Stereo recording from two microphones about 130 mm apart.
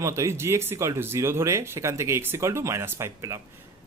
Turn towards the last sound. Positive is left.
turn(degrees=-20)  # may be behind; listen again after turning